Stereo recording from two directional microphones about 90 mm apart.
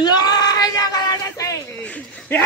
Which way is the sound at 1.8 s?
20° left (ahead or behind).